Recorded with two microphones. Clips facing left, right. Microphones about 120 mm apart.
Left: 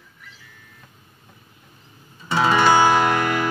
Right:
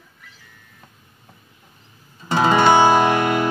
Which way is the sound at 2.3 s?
25° right (ahead or behind).